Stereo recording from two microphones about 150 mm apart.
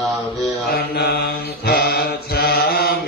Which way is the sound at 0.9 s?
90° left.